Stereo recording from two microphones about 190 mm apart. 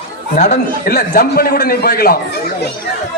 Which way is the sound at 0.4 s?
60° left (ahead or behind).